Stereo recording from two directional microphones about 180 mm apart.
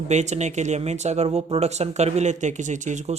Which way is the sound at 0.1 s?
40° right (ahead or behind).